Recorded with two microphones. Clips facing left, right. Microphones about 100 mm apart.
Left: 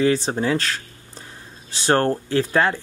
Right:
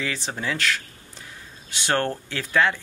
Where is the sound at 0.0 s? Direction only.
35° left (ahead or behind).